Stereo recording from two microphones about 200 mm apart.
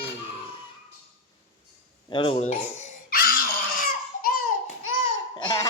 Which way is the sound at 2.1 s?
25° left (ahead or behind).